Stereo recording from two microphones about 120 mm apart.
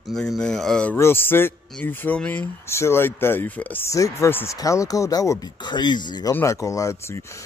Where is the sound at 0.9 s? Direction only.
20° left (ahead or behind); by 6.3 s 35° left (ahead or behind).